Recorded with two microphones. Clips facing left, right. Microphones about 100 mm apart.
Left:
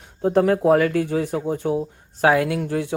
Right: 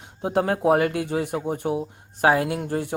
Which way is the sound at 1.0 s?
60° right (ahead or behind).